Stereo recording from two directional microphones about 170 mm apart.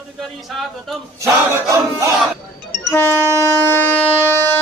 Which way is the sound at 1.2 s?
15° right (ahead or behind).